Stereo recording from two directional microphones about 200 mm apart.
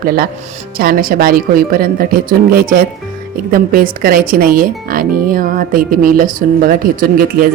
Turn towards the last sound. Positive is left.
turn(degrees=-45)  # may be behind; listen again after turning